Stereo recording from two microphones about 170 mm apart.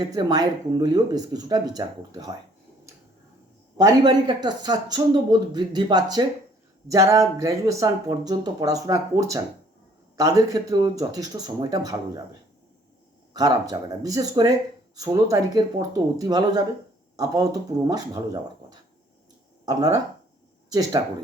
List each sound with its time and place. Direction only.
0.1 s speech: 20° right (ahead or behind)
3.8 s speech: 25° right (ahead or behind)
13.3 s speech: 20° right (ahead or behind)